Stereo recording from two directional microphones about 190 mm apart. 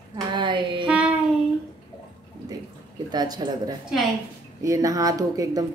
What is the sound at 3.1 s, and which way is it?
Speech, 20° right (ahead or behind).